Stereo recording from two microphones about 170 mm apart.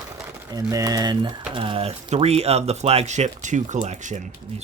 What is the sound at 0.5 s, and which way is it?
Speech, 20° right (ahead or behind).